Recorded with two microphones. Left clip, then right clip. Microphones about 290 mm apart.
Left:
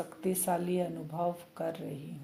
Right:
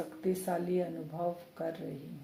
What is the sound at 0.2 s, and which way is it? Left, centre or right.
Speech, left.